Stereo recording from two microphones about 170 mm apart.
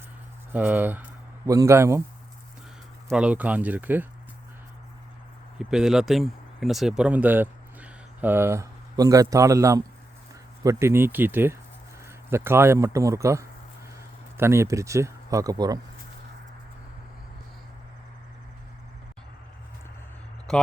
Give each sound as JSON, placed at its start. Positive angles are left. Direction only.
{"t": 0.5, "sound": "speech", "side_deg": -10}
{"t": 3.1, "sound": "speech", "side_deg": -5}
{"t": 5.5, "sound": "speech", "side_deg": -5}
{"t": 20.5, "sound": "speech", "side_deg": 5}